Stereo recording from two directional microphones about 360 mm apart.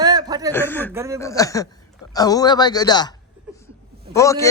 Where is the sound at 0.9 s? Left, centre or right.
Centre.